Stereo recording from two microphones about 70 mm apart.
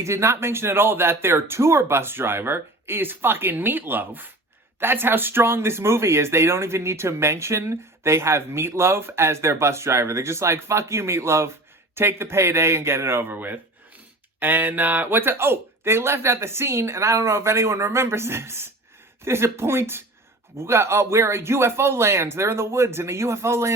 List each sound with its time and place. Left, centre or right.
0.0 s speech: right